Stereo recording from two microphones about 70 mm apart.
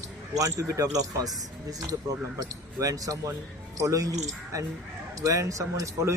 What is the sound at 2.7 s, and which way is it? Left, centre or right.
Speech, right.